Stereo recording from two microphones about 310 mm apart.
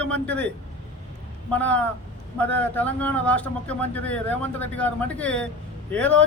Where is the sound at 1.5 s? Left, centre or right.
Centre.